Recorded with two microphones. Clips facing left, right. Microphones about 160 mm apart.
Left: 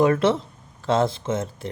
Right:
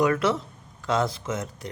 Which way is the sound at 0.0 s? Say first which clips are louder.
Left 4 dB; 25° left (ahead or behind).